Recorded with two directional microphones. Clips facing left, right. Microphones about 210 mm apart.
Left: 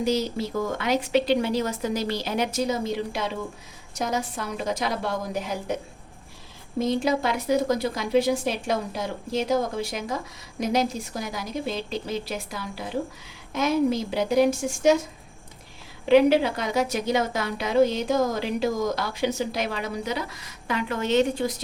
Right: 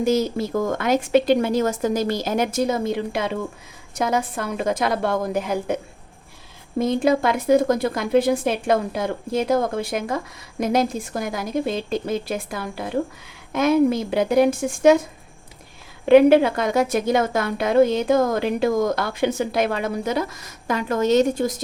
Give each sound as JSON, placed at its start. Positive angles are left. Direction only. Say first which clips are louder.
{"t": 0.0, "sound": "a woman's voice", "louder": "right 5 dB", "side_deg": -50}
{"t": 6.7, "sound": "a woman's voice", "louder": "right 4 dB", "side_deg": -55}
{"t": 16.0, "sound": "a woman's voice", "louder": "right 5 dB", "side_deg": -55}